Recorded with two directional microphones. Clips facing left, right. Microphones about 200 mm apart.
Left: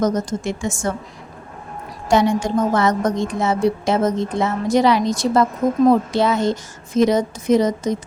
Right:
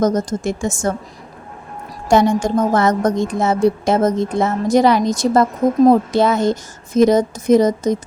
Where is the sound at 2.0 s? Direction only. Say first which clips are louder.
Right 3 dB; 45° right (ahead or behind).